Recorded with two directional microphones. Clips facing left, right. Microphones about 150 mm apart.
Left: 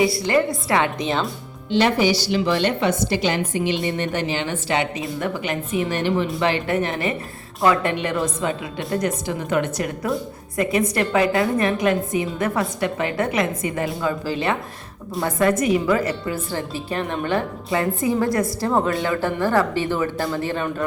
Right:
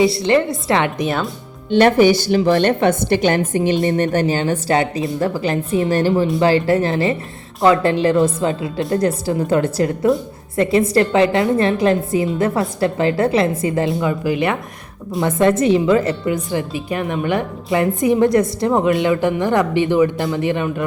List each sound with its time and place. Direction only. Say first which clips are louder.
0.0 s a woman's voice: right 4 dB; 25° right (ahead or behind)
1.7 s a woman's voice: right 6 dB; 55° right (ahead or behind); by 20.8 s 15° right (ahead or behind)